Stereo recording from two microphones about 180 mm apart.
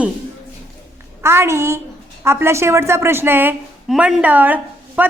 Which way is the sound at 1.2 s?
15° right (ahead or behind).